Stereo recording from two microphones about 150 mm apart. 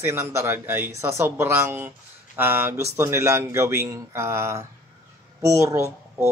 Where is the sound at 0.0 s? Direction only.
15° right (ahead or behind).